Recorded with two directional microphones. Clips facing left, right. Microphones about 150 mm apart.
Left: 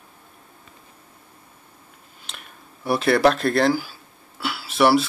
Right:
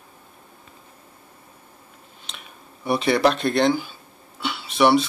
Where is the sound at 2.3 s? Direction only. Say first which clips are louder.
Even; centre (ahead or behind).